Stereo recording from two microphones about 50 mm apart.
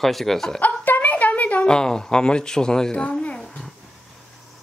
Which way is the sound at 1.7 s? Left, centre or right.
Centre.